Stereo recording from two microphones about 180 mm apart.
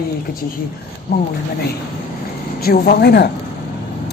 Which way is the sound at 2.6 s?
60° left (ahead or behind).